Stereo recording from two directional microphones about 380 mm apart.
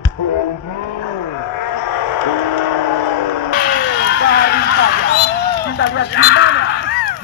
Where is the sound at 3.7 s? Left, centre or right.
Left.